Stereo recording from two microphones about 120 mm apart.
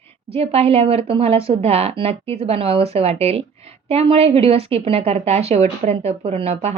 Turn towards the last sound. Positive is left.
turn(degrees=-60)  # may be behind; listen again after turning